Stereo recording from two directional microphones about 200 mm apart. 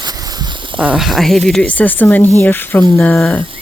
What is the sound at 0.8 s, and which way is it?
Speech, 5° right (ahead or behind).